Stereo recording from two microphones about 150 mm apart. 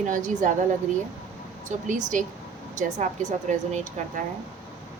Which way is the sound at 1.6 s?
55° right (ahead or behind).